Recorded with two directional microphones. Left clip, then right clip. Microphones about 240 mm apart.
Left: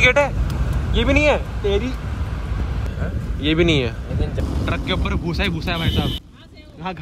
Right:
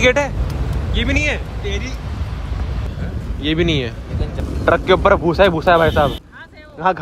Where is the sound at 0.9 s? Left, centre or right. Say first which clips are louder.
Left 3 dB; centre.